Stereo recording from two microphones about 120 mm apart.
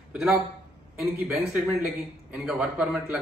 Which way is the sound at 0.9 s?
5° right (ahead or behind).